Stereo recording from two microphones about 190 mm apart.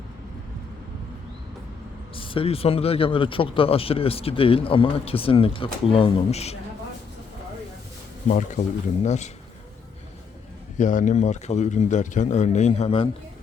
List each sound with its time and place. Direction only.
2.1 s speech: 30° left (ahead or behind)
8.3 s speech: 40° left (ahead or behind)
10.8 s speech: 40° left (ahead or behind)